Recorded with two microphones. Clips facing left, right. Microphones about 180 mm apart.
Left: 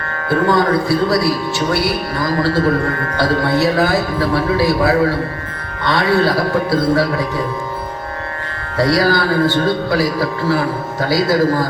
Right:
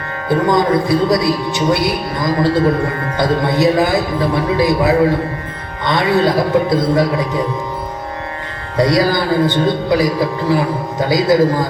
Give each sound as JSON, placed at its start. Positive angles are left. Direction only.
{"t": 0.3, "sound": "speech", "side_deg": -20}
{"t": 8.8, "sound": "speech", "side_deg": -20}